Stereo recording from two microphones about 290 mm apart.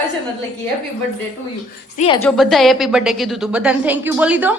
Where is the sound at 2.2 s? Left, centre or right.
Centre.